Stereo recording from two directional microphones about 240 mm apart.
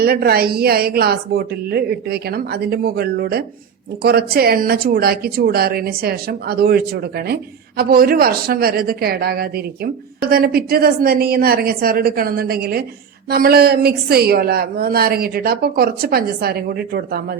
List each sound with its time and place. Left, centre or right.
0.0 s speech: right